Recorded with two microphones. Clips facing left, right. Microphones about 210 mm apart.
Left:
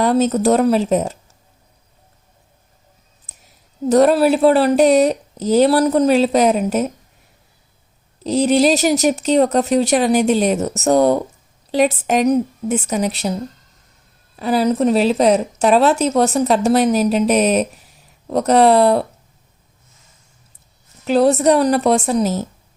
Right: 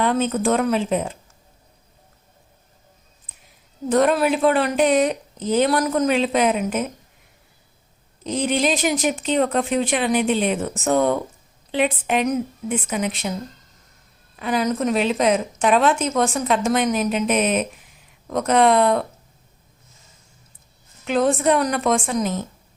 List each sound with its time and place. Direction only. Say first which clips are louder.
0.0 s speech: left 5 dB; 40° left (ahead or behind)
3.8 s speech: left 5 dB; 40° left (ahead or behind)
8.2 s speech: left 7 dB; 40° left (ahead or behind)
14.3 s speech: left 5 dB; 35° left (ahead or behind)
21.0 s speech: left 5 dB; 35° left (ahead or behind)